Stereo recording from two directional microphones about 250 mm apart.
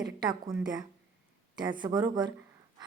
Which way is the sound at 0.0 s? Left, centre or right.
Centre.